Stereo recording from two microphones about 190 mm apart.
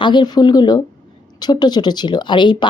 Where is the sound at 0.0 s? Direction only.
25° left (ahead or behind).